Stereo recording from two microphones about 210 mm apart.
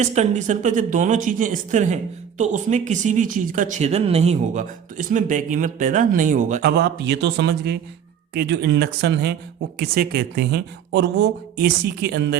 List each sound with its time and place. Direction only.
0.0 s speech: 35° right (ahead or behind); by 12.4 s 55° right (ahead or behind)